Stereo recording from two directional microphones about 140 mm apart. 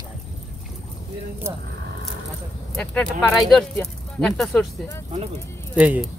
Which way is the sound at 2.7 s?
5° left (ahead or behind).